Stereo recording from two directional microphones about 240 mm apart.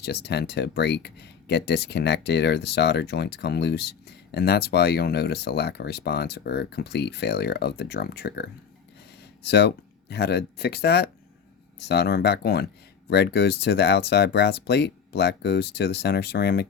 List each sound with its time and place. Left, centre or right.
0.0 s speech: left